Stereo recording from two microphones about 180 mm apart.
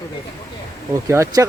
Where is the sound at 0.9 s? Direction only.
15° right (ahead or behind).